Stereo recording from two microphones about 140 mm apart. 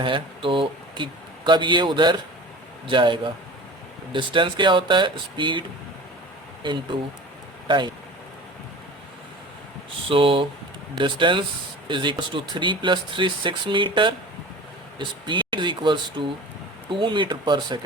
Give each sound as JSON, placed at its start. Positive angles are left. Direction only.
{"t": 0.0, "sound": "speech", "side_deg": -35}
{"t": 10.1, "sound": "speech", "side_deg": -40}